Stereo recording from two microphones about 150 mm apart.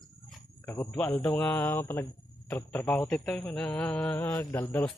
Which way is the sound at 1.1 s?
20° left (ahead or behind).